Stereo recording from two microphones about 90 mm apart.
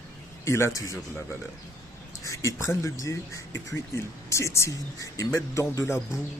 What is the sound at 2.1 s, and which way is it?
Speech, 35° left (ahead or behind).